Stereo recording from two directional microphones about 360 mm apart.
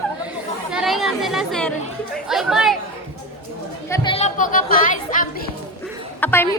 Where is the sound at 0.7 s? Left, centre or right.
Centre.